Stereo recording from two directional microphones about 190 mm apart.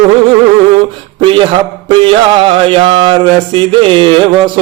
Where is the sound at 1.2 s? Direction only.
25° right (ahead or behind).